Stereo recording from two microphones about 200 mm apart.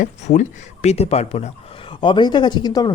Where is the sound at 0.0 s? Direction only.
35° left (ahead or behind).